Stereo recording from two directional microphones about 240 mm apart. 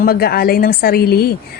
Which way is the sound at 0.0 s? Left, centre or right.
Left.